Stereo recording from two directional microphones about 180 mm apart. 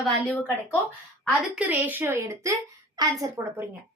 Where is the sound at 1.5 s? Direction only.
10° right (ahead or behind).